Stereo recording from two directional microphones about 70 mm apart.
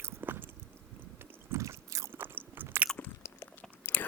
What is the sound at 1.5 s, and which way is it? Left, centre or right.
Biting, right.